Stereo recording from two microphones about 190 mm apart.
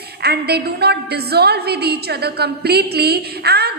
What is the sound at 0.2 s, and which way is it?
A woman's voice, 55° right (ahead or behind).